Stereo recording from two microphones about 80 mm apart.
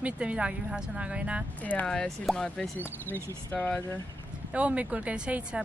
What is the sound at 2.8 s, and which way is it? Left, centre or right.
Speech, left.